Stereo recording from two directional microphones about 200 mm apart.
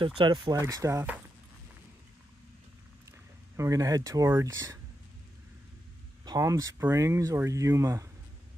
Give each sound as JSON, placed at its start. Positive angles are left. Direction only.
{"t": 0.2, "sound": "speech", "side_deg": -20}
{"t": 3.1, "sound": "speech", "side_deg": -15}
{"t": 6.2, "sound": "speech", "side_deg": -20}